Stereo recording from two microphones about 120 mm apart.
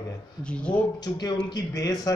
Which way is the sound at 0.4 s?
10° left (ahead or behind).